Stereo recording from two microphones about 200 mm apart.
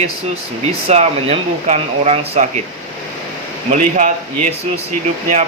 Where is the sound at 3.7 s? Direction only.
40° right (ahead or behind).